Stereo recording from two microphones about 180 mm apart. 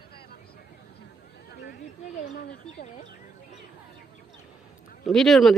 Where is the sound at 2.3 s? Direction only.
60° left (ahead or behind).